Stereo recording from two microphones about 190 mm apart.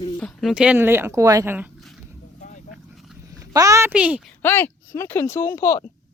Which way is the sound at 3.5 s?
15° right (ahead or behind).